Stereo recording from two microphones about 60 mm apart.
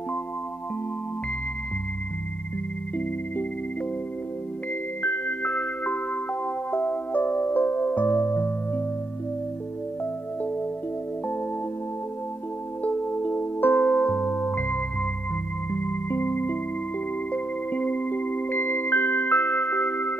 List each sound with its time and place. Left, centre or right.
5.0 s music: left
5.4 s music: left
12.8 s music: left
17.3 s music: left